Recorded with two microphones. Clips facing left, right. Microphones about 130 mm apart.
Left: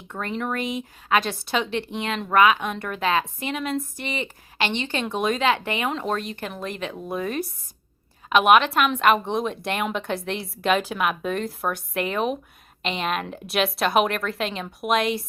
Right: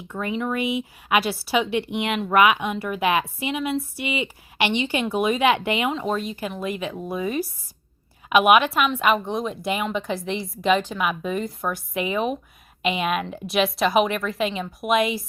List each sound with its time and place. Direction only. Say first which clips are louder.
0.1 s speech: right 2 dB; 5° right (ahead or behind)
5.9 s speech: right 1 dB; 5° right (ahead or behind)